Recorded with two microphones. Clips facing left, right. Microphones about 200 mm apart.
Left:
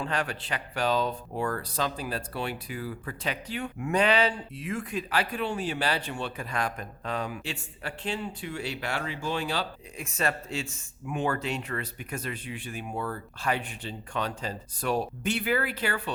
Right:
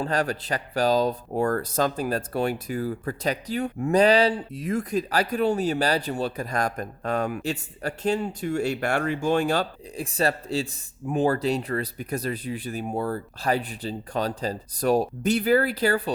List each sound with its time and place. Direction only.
0.0 s speech: 40° right (ahead or behind)
10.0 s speech: 35° right (ahead or behind)